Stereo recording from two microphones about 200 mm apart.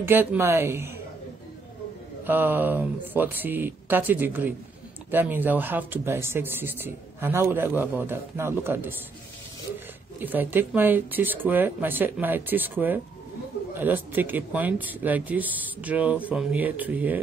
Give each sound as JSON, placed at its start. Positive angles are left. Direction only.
{"t": 0.0, "sound": "speech", "side_deg": -10}
{"t": 2.2, "sound": "speech", "side_deg": -10}
{"t": 10.2, "sound": "speech", "side_deg": -10}